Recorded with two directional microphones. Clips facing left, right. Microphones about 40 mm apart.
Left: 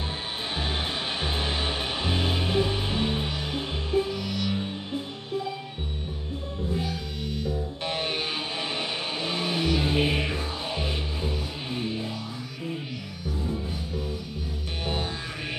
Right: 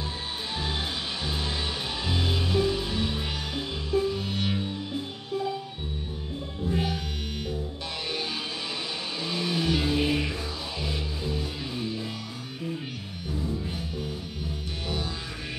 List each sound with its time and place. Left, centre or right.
0.5 s music: left
7.8 s music: left